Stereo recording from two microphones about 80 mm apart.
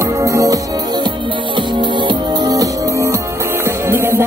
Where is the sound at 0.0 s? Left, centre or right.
Right.